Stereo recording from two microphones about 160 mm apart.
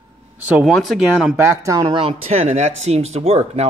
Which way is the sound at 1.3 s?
20° right (ahead or behind).